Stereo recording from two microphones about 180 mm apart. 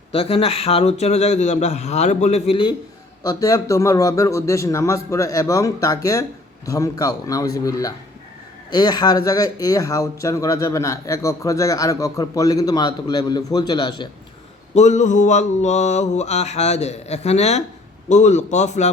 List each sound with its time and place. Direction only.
0.1 s mantra: 30° left (ahead or behind)
3.2 s a man's voice: 20° left (ahead or behind)
14.8 s mantra: 40° left (ahead or behind)